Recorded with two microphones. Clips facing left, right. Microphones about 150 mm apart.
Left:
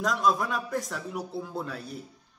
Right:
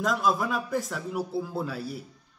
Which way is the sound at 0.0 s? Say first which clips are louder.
Even; 5° right (ahead or behind).